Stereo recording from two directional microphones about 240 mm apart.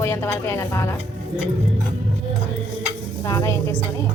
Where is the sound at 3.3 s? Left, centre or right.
Centre.